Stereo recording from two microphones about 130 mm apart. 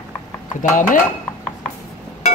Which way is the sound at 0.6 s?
80° left.